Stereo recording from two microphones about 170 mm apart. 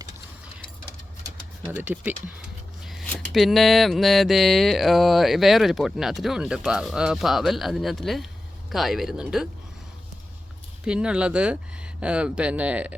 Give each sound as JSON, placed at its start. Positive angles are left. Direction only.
{"t": 1.6, "sound": "speech", "side_deg": -10}
{"t": 2.8, "sound": "a sound", "side_deg": 0}
{"t": 3.3, "sound": "mantra", "side_deg": 0}
{"t": 10.8, "sound": "speech", "side_deg": -5}